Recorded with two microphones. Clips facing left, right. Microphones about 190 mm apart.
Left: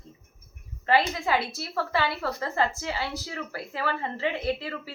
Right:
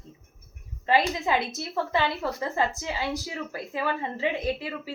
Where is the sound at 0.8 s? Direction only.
20° right (ahead or behind).